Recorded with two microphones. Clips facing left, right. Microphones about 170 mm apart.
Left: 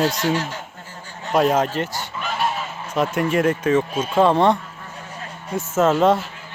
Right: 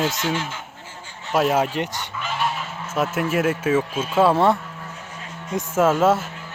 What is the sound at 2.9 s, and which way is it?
Speech, 5° right (ahead or behind).